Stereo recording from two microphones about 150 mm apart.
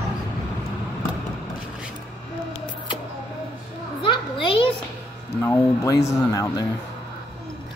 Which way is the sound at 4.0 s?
35° left (ahead or behind).